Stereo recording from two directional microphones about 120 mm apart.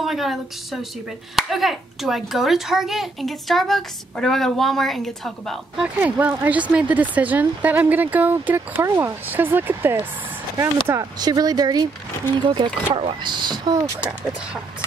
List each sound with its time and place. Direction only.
0.0 s a child's voice: centre (ahead or behind)
5.9 s speech: 15° right (ahead or behind)
10.9 s speech: 30° right (ahead or behind)